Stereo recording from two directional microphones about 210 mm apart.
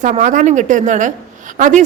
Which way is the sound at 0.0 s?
35° right (ahead or behind).